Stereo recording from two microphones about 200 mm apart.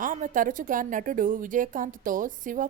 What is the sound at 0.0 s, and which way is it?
A woman's voice, 40° right (ahead or behind).